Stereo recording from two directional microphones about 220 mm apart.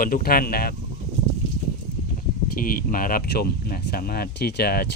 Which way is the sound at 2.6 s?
40° left (ahead or behind).